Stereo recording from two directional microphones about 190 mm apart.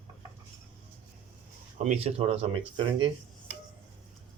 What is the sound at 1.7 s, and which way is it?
Speech, 35° right (ahead or behind).